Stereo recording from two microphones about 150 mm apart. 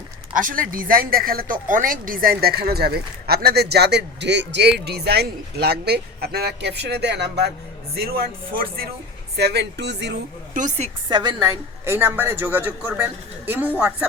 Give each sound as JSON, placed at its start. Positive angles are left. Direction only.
{"t": 0.3, "sound": "speech", "side_deg": -65}
{"t": 10.5, "sound": "speech", "side_deg": -60}
{"t": 11.1, "sound": "a woman's voice", "side_deg": -30}
{"t": 11.4, "sound": "speech", "side_deg": -15}